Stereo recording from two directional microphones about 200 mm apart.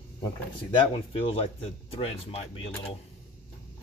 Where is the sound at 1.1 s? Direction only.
25° left (ahead or behind).